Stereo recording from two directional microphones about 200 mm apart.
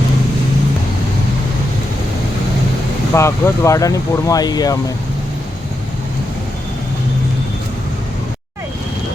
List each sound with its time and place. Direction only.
3.2 s speech: 15° left (ahead or behind)